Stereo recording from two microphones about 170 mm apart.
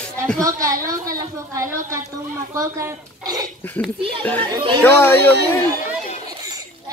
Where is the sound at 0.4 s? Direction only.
20° right (ahead or behind).